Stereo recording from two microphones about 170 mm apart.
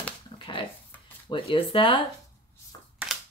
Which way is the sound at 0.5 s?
30° left (ahead or behind).